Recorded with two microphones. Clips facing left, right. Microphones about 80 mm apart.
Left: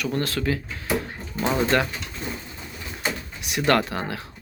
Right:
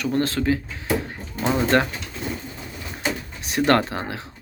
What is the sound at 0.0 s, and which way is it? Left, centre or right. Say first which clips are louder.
Speech: right 3 dB; right.